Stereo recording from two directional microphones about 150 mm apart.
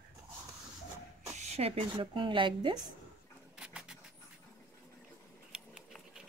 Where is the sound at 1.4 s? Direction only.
45° right (ahead or behind).